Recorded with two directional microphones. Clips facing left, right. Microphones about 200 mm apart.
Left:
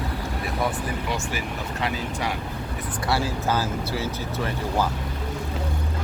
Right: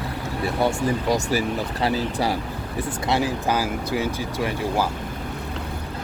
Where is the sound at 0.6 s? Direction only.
25° right (ahead or behind).